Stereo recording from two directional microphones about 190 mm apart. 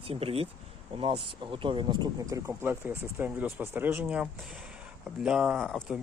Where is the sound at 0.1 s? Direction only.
30° right (ahead or behind).